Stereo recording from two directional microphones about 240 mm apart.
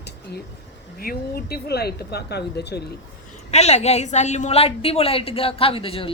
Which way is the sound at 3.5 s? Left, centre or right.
Left.